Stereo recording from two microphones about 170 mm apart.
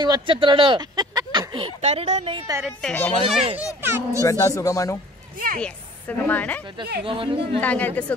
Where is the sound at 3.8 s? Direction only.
15° right (ahead or behind).